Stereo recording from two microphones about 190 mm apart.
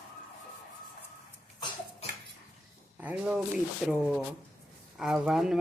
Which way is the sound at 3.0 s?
5° right (ahead or behind).